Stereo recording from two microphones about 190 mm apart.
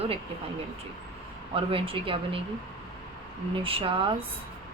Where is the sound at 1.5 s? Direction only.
30° right (ahead or behind).